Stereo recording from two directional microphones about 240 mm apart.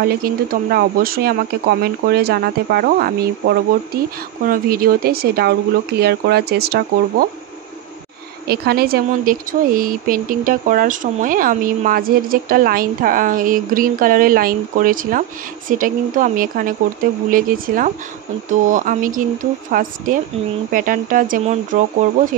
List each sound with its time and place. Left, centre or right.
0.0 s speech: right
8.5 s speech: right